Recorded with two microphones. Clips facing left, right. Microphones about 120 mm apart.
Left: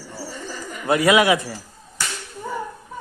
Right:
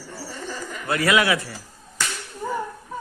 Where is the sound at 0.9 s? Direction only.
20° left (ahead or behind).